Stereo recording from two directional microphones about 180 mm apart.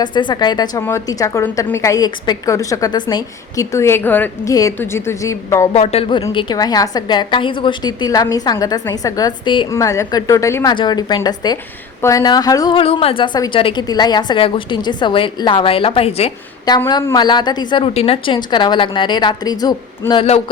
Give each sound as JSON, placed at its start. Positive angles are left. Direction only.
{"t": 0.0, "sound": "a woman's voice", "side_deg": 25}
{"t": 5.7, "sound": "a woman's voice", "side_deg": 35}
{"t": 16.6, "sound": "a woman's voice", "side_deg": 25}